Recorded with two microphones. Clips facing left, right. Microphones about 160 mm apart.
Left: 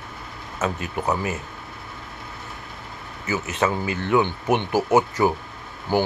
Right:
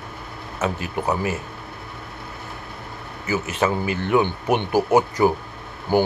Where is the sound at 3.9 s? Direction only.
20° right (ahead or behind).